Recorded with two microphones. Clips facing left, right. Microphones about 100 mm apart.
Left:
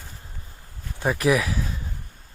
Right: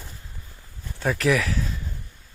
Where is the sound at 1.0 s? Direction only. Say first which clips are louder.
Left 1 dB; 15° left (ahead or behind).